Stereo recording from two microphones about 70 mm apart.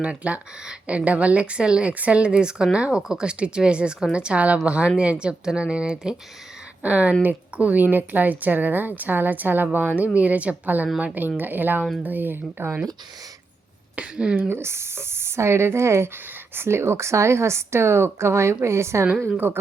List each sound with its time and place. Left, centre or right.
0.0 s speech: centre
13.9 s speech: centre
14.5 s speech: right